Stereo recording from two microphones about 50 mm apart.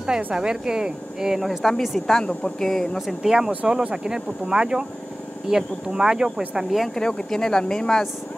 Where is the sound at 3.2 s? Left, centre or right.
Centre.